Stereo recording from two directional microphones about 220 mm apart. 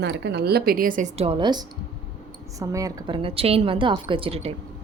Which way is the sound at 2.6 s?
15° right (ahead or behind).